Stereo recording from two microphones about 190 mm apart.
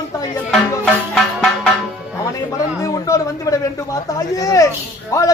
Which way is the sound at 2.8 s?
20° left (ahead or behind).